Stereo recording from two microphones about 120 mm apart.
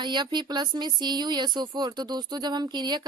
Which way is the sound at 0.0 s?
40° right (ahead or behind).